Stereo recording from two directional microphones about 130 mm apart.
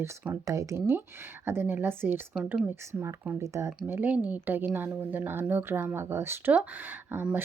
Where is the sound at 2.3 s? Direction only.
5° right (ahead or behind).